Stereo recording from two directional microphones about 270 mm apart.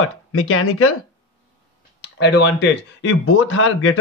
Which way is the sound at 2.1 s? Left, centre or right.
Left.